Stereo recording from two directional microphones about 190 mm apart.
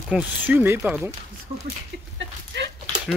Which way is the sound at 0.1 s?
10° right (ahead or behind).